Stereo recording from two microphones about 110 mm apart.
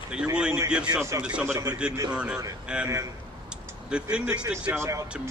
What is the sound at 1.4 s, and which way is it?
Speech, 25° right (ahead or behind).